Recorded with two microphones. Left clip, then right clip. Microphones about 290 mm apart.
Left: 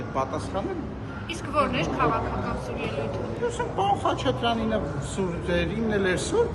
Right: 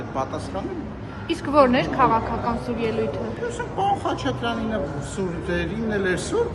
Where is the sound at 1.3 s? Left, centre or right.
Right.